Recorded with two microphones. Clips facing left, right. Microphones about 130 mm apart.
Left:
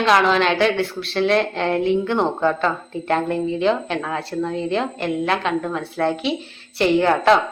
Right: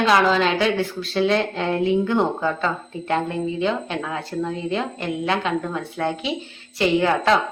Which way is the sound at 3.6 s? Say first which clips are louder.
Left 4 dB; 30° left (ahead or behind).